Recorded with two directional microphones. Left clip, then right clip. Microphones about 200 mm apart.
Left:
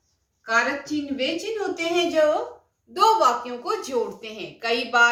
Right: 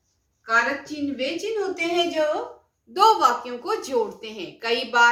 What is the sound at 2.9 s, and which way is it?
A woman's voice, 25° right (ahead or behind).